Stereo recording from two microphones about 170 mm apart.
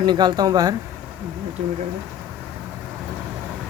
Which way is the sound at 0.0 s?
25° right (ahead or behind).